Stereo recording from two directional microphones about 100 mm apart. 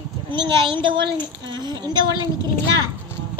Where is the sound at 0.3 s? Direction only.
50° right (ahead or behind).